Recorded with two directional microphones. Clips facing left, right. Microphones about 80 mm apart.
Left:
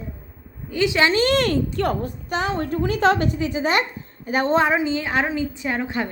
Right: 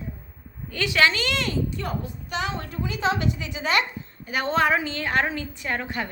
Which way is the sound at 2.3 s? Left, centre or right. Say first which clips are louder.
Left 6 dB; left.